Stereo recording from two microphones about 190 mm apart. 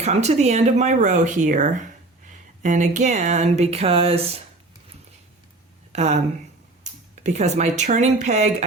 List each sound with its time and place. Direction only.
0.0 s speech: 35° right (ahead or behind)
5.9 s speech: 35° right (ahead or behind)
7.2 s speech: 40° right (ahead or behind)